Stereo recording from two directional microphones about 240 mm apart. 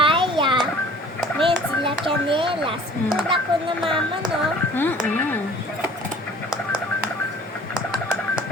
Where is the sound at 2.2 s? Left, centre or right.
Right.